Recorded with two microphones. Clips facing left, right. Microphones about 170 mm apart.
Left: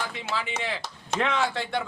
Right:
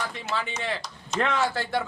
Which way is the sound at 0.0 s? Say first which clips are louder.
Right 1 dB; centre (ahead or behind).